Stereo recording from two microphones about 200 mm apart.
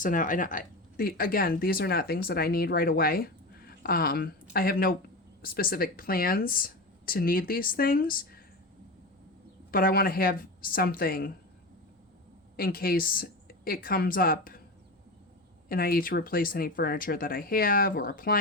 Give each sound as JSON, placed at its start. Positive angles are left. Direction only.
{"t": 0.0, "sound": "speech", "side_deg": 40}
{"t": 9.7, "sound": "speech", "side_deg": 45}
{"t": 12.5, "sound": "a woman's voice", "side_deg": 45}
{"t": 15.7, "sound": "speech", "side_deg": 50}